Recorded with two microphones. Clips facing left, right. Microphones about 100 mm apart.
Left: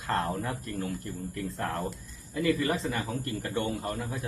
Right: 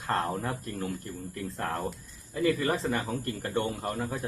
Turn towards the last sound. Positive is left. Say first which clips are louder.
# right 1 dB
turn(degrees=-40)  # may be behind; listen again after turning